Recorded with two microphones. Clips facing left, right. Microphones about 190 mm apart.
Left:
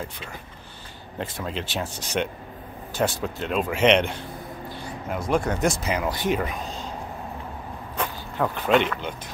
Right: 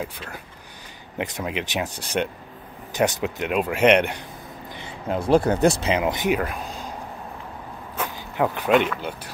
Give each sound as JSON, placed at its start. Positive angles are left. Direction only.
{"t": 1.1, "sound": "speech", "side_deg": -15}
{"t": 4.8, "sound": "speech", "side_deg": -30}
{"t": 8.0, "sound": "a sound", "side_deg": -10}
{"t": 8.7, "sound": "speech", "side_deg": -5}